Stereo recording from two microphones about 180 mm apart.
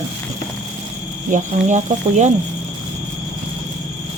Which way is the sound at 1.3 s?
45° right (ahead or behind).